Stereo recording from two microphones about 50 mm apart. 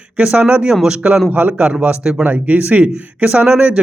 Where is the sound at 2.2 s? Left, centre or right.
Right.